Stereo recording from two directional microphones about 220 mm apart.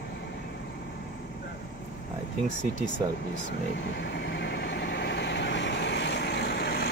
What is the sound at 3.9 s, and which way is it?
Vehicle, 50° left (ahead or behind).